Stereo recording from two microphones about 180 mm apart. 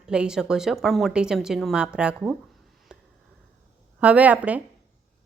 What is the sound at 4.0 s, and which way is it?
Speech, 5° right (ahead or behind).